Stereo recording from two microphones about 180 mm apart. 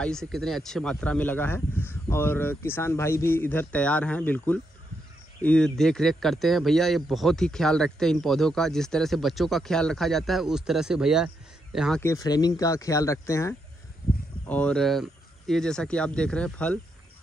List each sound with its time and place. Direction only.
0.0 s speech: 5° left (ahead or behind)
12.0 s speech: 20° left (ahead or behind)
14.5 s speech: 5° left (ahead or behind)